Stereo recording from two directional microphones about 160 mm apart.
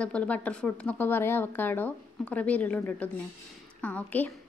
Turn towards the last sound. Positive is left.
turn(degrees=10)  # may be behind; listen again after turning